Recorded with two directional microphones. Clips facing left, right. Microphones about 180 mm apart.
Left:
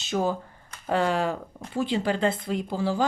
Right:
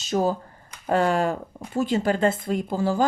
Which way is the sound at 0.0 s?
40° right (ahead or behind).